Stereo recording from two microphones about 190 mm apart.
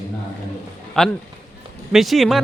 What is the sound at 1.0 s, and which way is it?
Speech, 5° left (ahead or behind).